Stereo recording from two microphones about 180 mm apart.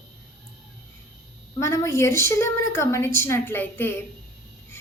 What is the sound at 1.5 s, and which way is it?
Speech, 15° left (ahead or behind).